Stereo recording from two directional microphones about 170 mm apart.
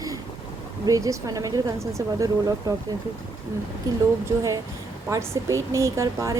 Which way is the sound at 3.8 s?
20° right (ahead or behind).